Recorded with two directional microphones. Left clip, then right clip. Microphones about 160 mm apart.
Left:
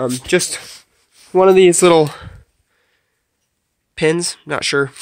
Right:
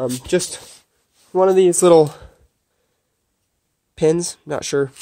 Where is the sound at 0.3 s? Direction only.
20° left (ahead or behind).